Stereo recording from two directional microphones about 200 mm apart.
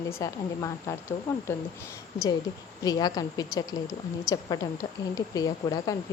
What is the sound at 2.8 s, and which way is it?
Speech, 20° left (ahead or behind).